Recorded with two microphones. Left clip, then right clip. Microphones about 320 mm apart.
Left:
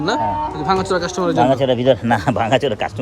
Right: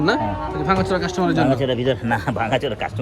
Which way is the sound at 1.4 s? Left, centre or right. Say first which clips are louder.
Left 5 dB; left.